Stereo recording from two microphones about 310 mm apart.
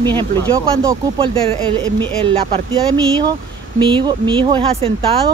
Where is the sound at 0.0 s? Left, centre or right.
Centre.